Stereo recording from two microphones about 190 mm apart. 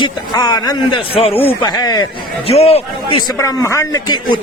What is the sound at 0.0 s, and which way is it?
A man's voice, 20° left (ahead or behind).